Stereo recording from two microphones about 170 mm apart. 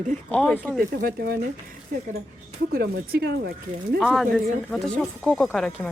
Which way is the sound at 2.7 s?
70° right (ahead or behind).